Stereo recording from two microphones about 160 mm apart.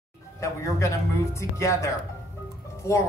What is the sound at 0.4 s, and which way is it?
A woman's voice, 20° left (ahead or behind).